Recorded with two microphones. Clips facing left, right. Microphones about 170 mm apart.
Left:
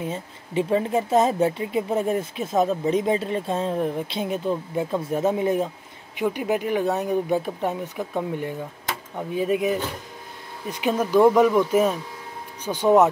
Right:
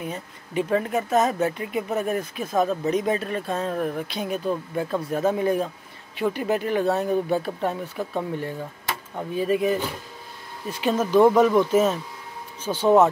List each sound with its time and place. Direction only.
0.0 s speech: 25° left (ahead or behind)
11.1 s speech: centre (ahead or behind); by 13.1 s 15° left (ahead or behind)